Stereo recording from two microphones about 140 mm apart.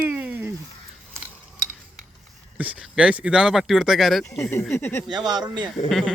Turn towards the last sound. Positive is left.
turn(degrees=-30)  # may be behind; listen again after turning